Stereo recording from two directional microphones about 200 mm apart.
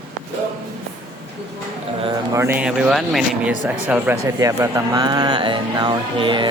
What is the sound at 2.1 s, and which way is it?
Speech, 15° right (ahead or behind).